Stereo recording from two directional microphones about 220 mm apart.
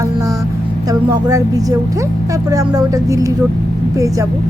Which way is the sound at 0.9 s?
15° right (ahead or behind).